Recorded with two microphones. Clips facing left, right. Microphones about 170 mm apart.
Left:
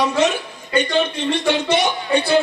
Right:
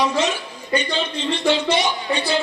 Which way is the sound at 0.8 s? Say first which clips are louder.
Left 10 dB; 55° left (ahead or behind).